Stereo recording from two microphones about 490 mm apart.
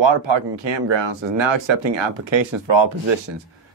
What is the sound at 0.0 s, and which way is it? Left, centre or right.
Speech, right.